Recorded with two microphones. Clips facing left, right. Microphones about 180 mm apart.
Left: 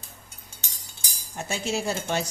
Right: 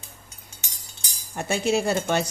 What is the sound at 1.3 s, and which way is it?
Speech, 60° right (ahead or behind).